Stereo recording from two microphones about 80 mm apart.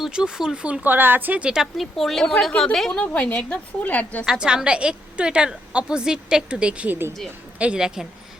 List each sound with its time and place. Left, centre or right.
0.0 s a woman's voice: centre
1.8 s a woman's voice: centre
2.5 s a woman's voice: centre
2.7 s a woman's voice: centre
3.0 s a woman's voice: centre
4.3 s a woman's voice: centre
7.6 s a woman's voice: centre